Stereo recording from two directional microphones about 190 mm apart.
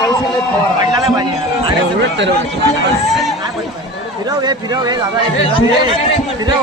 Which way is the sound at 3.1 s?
Centre (ahead or behind).